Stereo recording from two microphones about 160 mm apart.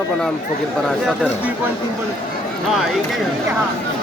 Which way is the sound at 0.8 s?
5° right (ahead or behind).